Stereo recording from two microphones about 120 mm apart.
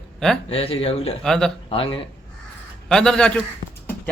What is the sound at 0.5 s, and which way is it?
Speech, 55° left (ahead or behind).